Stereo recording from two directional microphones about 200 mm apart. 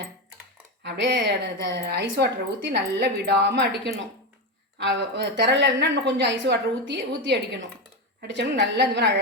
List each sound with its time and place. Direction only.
0.8 s a woman's voice: 60° right (ahead or behind)